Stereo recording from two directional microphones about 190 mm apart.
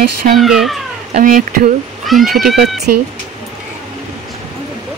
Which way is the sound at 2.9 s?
55° right (ahead or behind).